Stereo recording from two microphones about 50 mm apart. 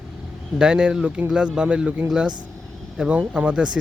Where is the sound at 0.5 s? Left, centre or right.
Centre.